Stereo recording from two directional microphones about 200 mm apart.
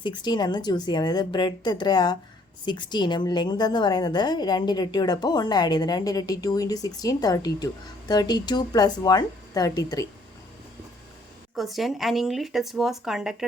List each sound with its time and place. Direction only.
0.0 s a woman's voice: 20° left (ahead or behind)
11.5 s speech: centre (ahead or behind)